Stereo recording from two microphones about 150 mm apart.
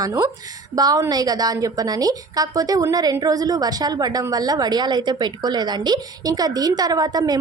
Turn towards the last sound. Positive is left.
turn(degrees=-25)  # may be behind; listen again after turning